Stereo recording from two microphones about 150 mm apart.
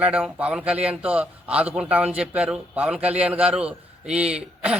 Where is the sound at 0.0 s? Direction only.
10° right (ahead or behind).